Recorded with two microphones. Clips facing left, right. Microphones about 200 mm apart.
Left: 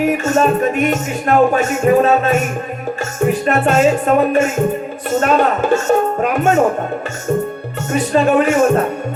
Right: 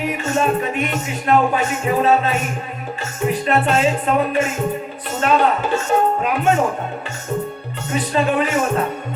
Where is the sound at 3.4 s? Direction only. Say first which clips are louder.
Left 4 dB; 45° left (ahead or behind).